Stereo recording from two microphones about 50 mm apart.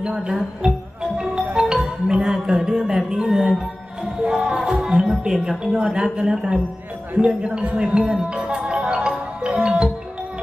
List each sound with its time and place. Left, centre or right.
0.0 s speech: centre
1.1 s music: centre
6.1 s speech: centre
8.1 s music: centre